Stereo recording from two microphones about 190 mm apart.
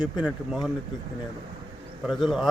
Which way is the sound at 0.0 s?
5° right (ahead or behind).